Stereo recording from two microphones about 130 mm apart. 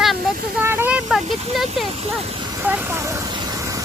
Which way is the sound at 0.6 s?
15° right (ahead or behind).